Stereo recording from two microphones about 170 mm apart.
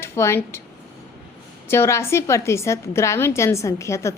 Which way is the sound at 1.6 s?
15° left (ahead or behind).